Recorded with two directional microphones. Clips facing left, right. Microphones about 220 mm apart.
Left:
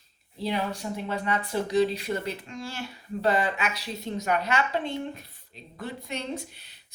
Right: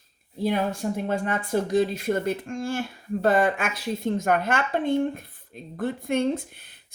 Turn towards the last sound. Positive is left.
turn(degrees=-50)  # may be behind; listen again after turning